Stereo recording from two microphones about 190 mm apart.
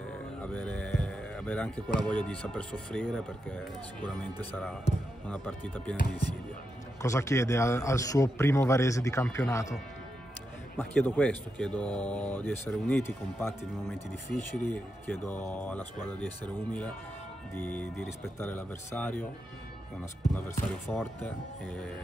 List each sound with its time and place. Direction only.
0.4 s speech: 5° left (ahead or behind)
7.0 s speech: 15° left (ahead or behind)
10.8 s speech: 10° left (ahead or behind)
20.3 s speech: 10° left (ahead or behind)